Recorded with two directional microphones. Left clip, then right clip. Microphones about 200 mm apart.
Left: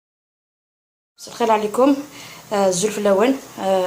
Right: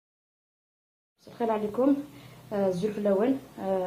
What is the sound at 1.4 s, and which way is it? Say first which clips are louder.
A woman's voice: left 10 dB; 25° left (ahead or behind).